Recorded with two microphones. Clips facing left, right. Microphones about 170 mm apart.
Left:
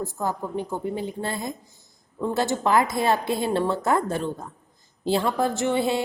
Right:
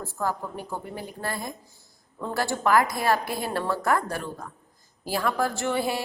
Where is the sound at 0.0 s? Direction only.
20° left (ahead or behind).